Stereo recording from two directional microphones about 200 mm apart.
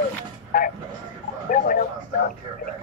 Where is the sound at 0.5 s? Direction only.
45° left (ahead or behind).